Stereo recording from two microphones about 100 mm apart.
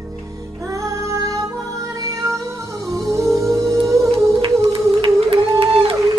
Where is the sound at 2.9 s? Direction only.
35° right (ahead or behind).